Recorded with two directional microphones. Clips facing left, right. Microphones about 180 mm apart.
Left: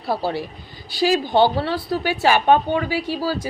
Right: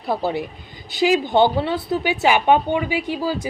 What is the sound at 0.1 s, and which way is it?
A woman's voice, 20° right (ahead or behind).